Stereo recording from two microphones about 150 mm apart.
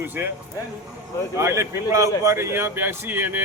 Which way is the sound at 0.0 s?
15° right (ahead or behind).